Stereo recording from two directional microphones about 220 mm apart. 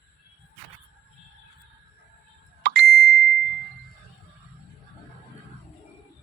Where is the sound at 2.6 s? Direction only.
45° right (ahead or behind).